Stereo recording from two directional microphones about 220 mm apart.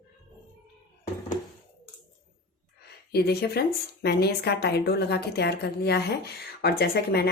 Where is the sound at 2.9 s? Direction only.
45° left (ahead or behind).